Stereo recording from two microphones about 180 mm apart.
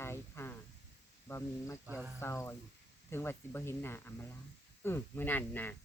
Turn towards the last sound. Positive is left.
turn(degrees=10)  # may be behind; listen again after turning